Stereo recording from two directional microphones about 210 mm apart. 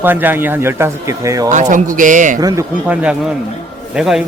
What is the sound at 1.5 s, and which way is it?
Speech, 35° right (ahead or behind).